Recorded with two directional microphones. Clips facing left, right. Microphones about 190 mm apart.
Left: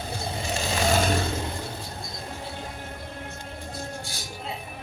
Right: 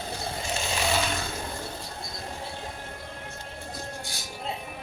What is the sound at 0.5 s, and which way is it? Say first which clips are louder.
Vehicle: left 4 dB; 40° left (ahead or behind).